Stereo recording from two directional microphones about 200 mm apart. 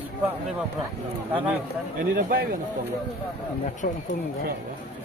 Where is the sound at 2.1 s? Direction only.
45° right (ahead or behind).